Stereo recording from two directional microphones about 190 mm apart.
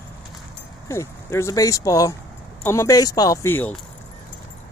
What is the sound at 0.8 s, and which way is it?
Speech, 15° left (ahead or behind).